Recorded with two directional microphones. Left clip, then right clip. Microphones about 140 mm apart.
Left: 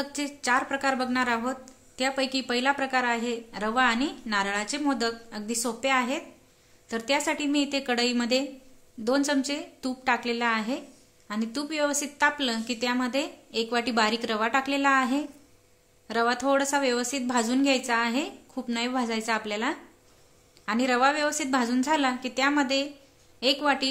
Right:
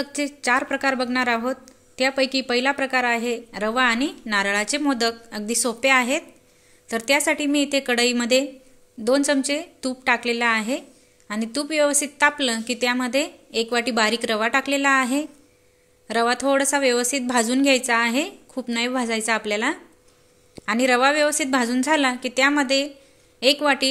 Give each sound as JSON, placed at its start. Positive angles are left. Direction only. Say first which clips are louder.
{"t": 0.0, "sound": "speech", "louder": "right 5 dB", "side_deg": -15}